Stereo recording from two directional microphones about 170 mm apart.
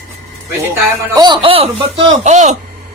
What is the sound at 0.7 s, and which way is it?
A man's voice, 25° right (ahead or behind).